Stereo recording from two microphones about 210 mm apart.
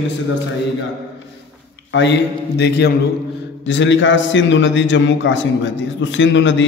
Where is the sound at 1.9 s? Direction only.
55° left (ahead or behind).